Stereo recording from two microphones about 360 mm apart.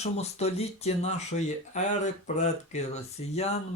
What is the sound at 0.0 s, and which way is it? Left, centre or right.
Speech, centre.